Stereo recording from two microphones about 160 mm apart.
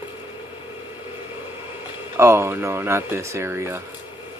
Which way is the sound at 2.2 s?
15° right (ahead or behind).